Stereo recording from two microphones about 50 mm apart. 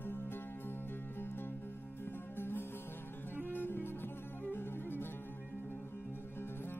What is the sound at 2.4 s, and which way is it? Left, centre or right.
Music, left.